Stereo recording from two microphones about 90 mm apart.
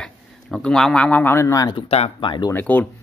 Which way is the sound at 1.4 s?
35° left (ahead or behind).